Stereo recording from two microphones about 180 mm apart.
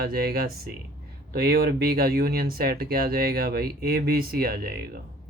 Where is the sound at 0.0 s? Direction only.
55° right (ahead or behind).